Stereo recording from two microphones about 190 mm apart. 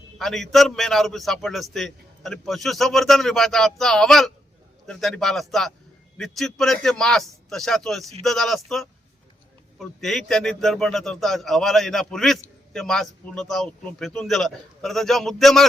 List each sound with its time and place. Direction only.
0.2 s a man's voice: centre (ahead or behind)